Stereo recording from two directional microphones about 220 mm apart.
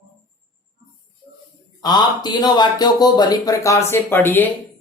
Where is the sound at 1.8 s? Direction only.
20° left (ahead or behind).